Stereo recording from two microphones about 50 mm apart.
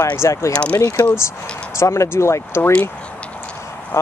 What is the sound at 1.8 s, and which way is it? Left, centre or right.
Speech, left.